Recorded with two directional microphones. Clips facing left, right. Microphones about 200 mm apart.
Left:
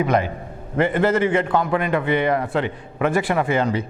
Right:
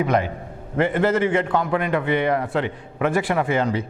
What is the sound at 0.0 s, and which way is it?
A man's voice, 15° left (ahead or behind).